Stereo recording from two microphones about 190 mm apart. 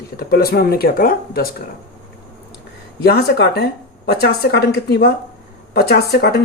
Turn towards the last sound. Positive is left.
turn(degrees=55)  # may be behind; listen again after turning